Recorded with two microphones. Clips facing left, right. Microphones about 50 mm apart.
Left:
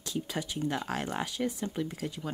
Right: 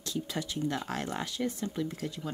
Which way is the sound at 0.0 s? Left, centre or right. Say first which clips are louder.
Even; centre.